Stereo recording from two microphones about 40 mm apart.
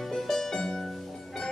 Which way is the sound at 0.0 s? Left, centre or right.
Centre.